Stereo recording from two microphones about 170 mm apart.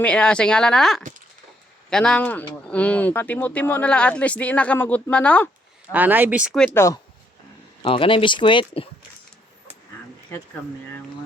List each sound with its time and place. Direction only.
0.0 s speech: 5° left (ahead or behind)
5.9 s speech: 10° right (ahead or behind)
6.7 s speech: 15° left (ahead or behind)
7.8 s speech: 30° left (ahead or behind)